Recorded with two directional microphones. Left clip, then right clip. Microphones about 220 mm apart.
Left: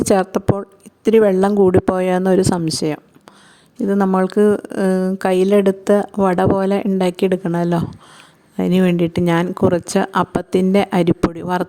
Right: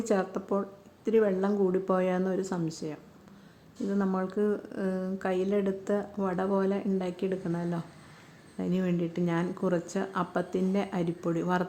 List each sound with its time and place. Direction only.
0.0 s a woman's voice: 50° left (ahead or behind)